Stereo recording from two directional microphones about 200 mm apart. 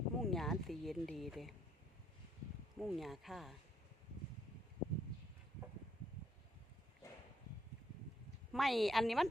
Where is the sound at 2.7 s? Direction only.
Centre (ahead or behind).